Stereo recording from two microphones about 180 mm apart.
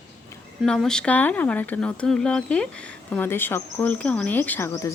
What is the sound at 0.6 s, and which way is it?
Speech, centre (ahead or behind).